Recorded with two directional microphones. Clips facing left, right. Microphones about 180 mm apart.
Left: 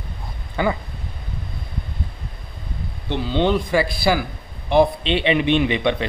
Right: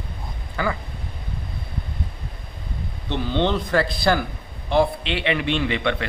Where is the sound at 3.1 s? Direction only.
15° left (ahead or behind).